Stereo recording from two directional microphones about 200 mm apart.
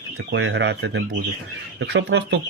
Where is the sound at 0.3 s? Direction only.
65° right (ahead or behind).